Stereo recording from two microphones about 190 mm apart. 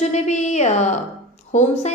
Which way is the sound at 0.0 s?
35° left (ahead or behind).